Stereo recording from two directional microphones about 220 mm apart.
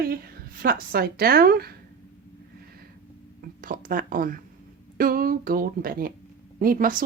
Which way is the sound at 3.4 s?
40° right (ahead or behind).